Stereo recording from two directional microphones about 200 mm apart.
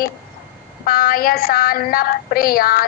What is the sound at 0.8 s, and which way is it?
Child singing, 45° left (ahead or behind).